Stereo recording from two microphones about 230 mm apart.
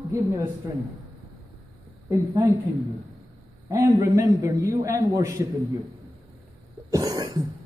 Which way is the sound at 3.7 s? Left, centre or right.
Centre.